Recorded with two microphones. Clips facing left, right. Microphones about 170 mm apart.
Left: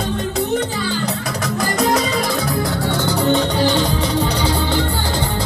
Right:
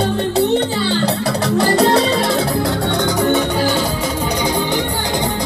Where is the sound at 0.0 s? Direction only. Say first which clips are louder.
Right 5 dB; 35° right (ahead or behind).